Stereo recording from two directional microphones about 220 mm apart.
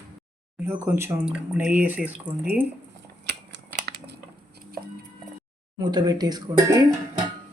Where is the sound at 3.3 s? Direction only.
50° right (ahead or behind).